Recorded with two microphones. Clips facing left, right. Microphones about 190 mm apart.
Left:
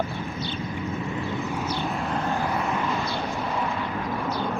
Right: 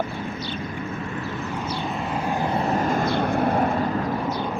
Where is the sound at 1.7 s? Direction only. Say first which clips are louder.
Right 2 dB; centre (ahead or behind).